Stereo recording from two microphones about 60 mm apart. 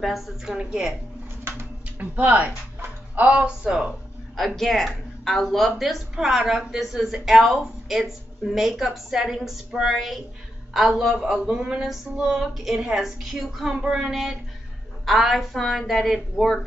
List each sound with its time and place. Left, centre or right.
0.0 s a woman's voice: centre
1.4 s a sound: right
2.1 s speech: right
4.6 s a woman's voice: centre
11.3 s a woman's voice: centre